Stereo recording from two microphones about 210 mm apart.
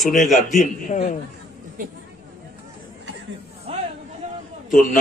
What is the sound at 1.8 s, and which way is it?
Speech, 40° right (ahead or behind).